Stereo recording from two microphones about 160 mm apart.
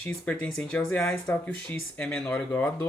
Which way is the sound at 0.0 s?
10° left (ahead or behind).